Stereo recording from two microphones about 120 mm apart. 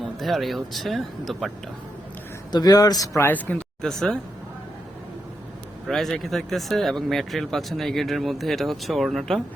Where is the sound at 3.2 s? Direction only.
15° left (ahead or behind).